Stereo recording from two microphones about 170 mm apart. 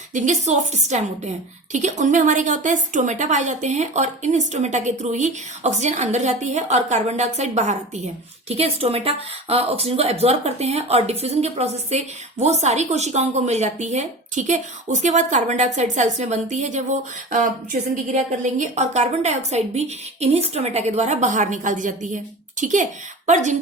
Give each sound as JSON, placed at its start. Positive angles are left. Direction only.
{"t": 0.1, "sound": "a woman's voice", "side_deg": -45}